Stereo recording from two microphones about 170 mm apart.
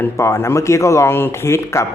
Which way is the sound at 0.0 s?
15° left (ahead or behind).